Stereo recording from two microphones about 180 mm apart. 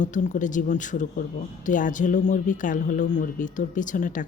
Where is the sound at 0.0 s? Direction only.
45° left (ahead or behind).